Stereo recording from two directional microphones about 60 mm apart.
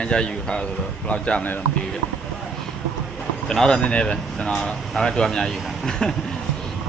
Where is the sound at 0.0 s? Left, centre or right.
Centre.